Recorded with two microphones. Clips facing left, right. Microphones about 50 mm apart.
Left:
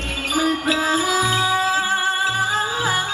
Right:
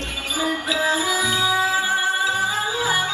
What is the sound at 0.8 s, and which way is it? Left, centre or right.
Music, left.